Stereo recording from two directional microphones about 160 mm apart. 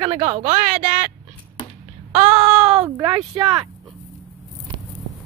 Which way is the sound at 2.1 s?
40° right (ahead or behind).